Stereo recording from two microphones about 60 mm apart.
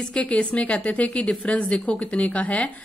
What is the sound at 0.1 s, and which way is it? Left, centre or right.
A woman's voice, left.